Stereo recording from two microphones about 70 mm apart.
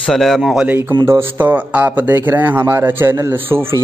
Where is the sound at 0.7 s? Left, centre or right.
Right.